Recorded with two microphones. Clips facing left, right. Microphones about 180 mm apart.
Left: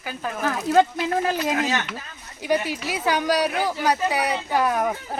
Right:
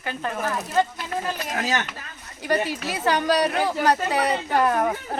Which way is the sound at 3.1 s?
10° left (ahead or behind).